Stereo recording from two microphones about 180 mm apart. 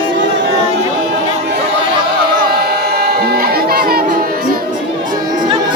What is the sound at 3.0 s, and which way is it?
Music, 65° right (ahead or behind).